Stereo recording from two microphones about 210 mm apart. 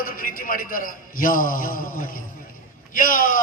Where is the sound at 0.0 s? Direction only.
40° left (ahead or behind).